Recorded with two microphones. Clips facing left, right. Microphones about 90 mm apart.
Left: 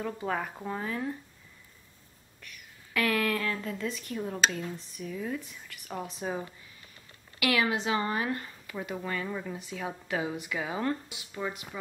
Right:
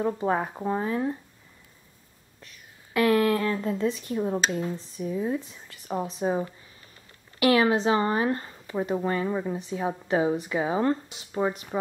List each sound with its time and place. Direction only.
0.0 s a woman's voice: 25° right (ahead or behind)
2.4 s a woman's voice: 25° right (ahead or behind)